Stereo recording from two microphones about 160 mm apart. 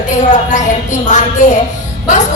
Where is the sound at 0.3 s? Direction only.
50° left (ahead or behind).